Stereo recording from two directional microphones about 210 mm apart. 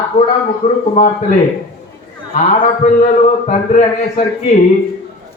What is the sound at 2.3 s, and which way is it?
A man's voice, 35° left (ahead or behind).